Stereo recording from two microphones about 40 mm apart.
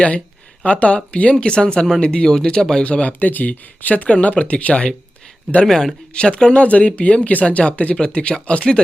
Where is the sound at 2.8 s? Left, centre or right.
Left.